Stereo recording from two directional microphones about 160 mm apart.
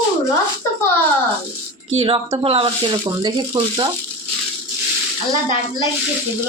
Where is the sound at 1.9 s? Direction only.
35° right (ahead or behind).